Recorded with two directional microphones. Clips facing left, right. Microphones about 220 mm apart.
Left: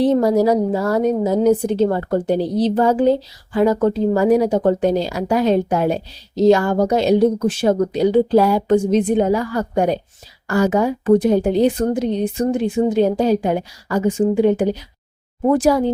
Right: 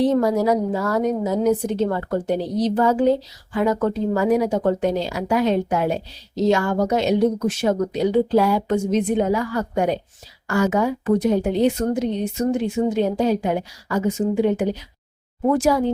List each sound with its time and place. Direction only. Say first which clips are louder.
0.0 s a woman's voice: left 3 dB; 30° left (ahead or behind)